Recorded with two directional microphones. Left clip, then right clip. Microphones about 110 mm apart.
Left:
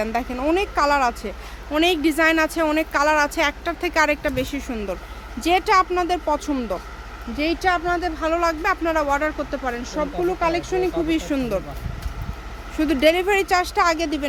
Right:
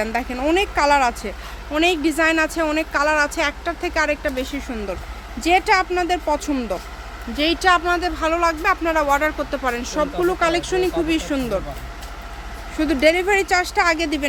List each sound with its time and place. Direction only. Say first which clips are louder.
0.0 s speech: right 1 dB; 10° left (ahead or behind)
1.7 s speech: right 1 dB; 20° left (ahead or behind)
5.4 s speech: right 1 dB; 15° left (ahead or behind)
6.2 s speech: right 1 dB; centre (ahead or behind)
10.9 s speech: right 1 dB; 5° left (ahead or behind)
12.7 s speech: right 1 dB; 20° left (ahead or behind); by 14.3 s centre (ahead or behind)